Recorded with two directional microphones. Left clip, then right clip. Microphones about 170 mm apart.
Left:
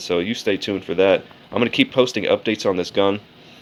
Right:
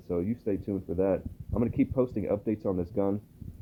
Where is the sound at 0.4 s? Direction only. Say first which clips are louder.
Left 10 dB; 10° left (ahead or behind).